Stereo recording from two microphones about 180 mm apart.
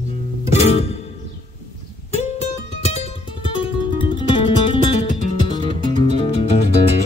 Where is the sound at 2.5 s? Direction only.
35° left (ahead or behind).